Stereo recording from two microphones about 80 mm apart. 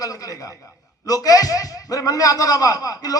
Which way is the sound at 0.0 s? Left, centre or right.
Left.